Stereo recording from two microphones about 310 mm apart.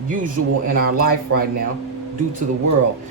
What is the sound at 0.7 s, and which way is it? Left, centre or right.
Speech, right.